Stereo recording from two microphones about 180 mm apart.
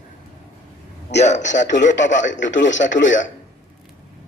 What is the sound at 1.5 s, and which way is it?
Speech, 80° left.